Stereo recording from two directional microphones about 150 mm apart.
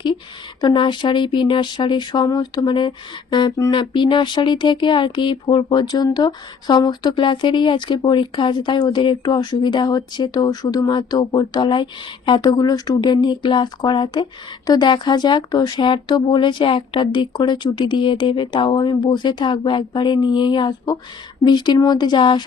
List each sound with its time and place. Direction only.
0.6 s speech: 30° left (ahead or behind)